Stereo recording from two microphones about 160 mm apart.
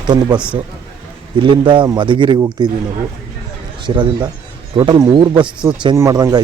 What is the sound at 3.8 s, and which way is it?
Speech, 30° right (ahead or behind).